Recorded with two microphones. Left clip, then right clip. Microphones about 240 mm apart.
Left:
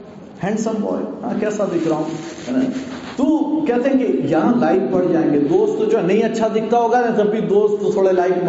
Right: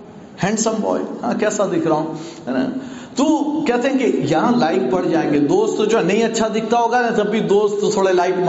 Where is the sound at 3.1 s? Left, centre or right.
Right.